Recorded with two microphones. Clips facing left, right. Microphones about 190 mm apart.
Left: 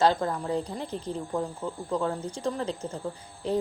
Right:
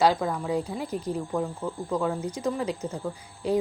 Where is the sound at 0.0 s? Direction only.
10° right (ahead or behind).